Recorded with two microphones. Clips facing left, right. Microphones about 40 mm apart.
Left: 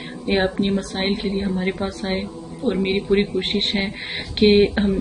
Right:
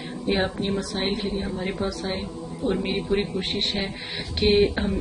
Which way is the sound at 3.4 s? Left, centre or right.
Left.